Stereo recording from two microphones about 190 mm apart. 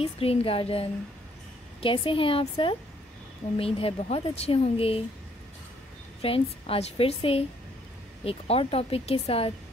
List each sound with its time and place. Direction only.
0.0 s a woman's voice: 30° left (ahead or behind)
6.2 s a woman's voice: 30° left (ahead or behind)